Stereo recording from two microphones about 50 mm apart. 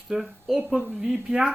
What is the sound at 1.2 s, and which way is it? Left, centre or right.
Speech, centre.